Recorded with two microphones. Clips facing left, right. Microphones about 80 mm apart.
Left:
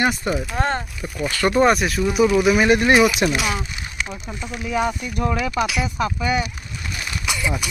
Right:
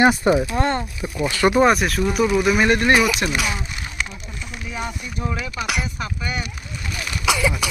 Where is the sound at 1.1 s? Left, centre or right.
Centre.